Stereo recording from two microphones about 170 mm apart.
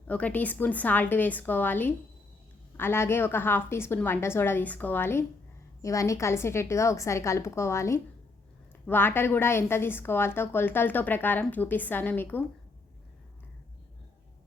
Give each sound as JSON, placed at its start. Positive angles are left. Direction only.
{"t": 0.1, "sound": "a woman's voice", "side_deg": 10}